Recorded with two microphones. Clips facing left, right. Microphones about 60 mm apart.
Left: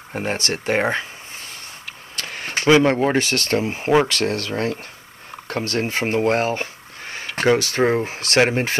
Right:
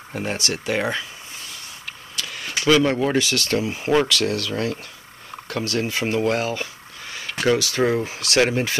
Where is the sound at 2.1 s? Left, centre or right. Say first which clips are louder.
Left 2 dB; left.